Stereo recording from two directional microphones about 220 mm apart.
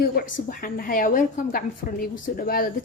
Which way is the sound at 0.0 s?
40° left (ahead or behind).